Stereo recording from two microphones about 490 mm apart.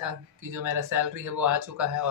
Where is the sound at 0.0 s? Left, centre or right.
Right.